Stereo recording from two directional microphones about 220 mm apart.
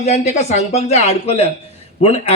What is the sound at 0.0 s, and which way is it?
A man's voice, 30° left (ahead or behind).